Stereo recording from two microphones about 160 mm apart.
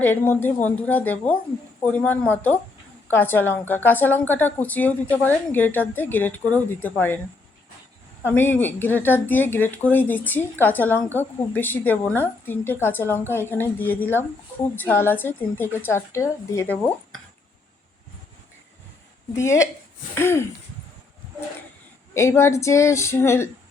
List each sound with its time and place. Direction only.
0.0 s a woman's voice: 10° left (ahead or behind)
8.2 s a woman's voice: 15° left (ahead or behind)
19.4 s a woman's voice: 20° left (ahead or behind)
22.1 s a woman's voice: 20° left (ahead or behind)